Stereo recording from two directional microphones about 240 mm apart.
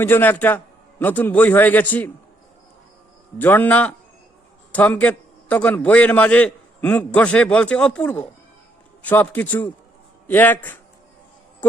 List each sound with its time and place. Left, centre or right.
0.0 s a man's voice: centre
3.3 s a man's voice: centre